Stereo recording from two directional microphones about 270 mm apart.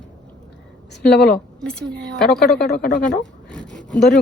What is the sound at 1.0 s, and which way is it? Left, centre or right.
Speech, left.